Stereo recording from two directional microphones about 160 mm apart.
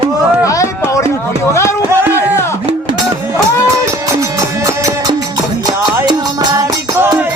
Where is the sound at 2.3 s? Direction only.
15° left (ahead or behind).